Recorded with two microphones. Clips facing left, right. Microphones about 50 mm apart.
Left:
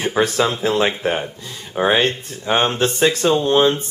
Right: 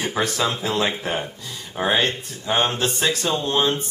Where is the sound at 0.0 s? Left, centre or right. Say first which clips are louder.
Left 5 dB; centre.